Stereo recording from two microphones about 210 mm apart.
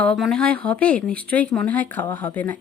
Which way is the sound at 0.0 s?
5° left (ahead or behind).